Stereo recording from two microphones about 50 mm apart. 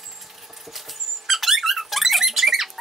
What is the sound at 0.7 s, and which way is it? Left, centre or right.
Squeak, centre.